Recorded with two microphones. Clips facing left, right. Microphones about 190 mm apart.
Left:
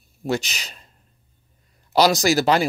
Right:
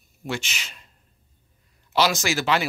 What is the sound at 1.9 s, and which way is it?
Speech, 40° left (ahead or behind).